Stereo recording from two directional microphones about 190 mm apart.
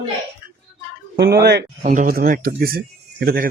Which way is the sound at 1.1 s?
60° right (ahead or behind).